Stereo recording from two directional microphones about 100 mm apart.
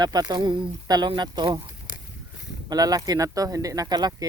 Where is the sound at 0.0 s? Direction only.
45° right (ahead or behind).